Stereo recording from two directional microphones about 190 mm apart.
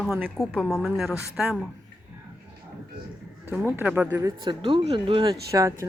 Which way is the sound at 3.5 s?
10° right (ahead or behind).